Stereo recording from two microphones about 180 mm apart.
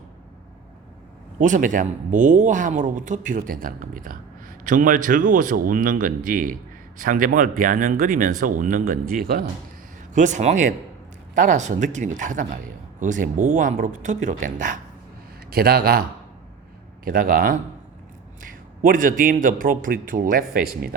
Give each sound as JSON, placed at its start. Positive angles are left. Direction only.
{"t": 1.4, "sound": "speech", "side_deg": -45}
{"t": 10.2, "sound": "speech", "side_deg": -45}
{"t": 15.4, "sound": "a man's voice", "side_deg": -60}
{"t": 17.1, "sound": "speech", "side_deg": -50}
{"t": 18.8, "sound": "speech", "side_deg": -50}